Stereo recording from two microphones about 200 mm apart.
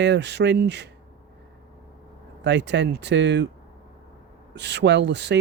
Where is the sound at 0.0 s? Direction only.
60° right (ahead or behind).